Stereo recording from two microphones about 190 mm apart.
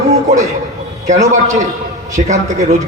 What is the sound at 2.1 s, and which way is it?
Speech, 40° right (ahead or behind).